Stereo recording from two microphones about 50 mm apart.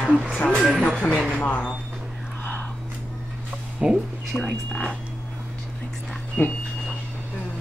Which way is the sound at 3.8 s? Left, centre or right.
Centre.